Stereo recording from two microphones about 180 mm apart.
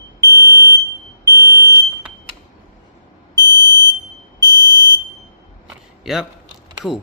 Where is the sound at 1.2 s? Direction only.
15° right (ahead or behind).